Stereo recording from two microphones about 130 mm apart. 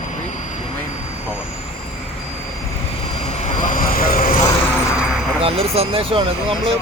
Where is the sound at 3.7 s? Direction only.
90° left.